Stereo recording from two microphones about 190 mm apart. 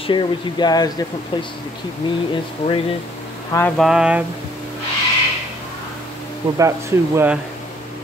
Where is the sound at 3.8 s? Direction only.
5° right (ahead or behind).